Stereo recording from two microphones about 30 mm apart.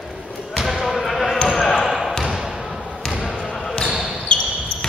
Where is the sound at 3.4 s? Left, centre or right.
Centre.